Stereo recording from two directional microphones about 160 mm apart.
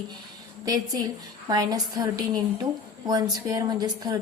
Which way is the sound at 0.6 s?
25° right (ahead or behind).